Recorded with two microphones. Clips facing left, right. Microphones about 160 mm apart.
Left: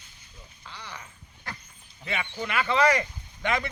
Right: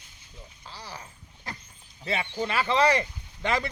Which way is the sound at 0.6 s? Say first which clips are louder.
Right 1 dB; 35° right (ahead or behind).